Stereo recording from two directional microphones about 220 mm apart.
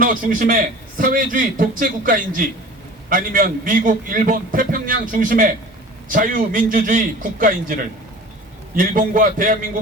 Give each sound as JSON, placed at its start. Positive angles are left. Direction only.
{"t": 0.0, "sound": "a man's voice", "side_deg": -40}